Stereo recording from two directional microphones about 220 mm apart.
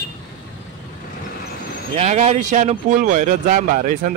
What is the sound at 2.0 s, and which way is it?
Speech, 30° right (ahead or behind).